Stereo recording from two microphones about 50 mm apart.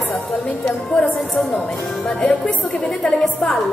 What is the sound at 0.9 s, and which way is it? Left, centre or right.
Speech, centre.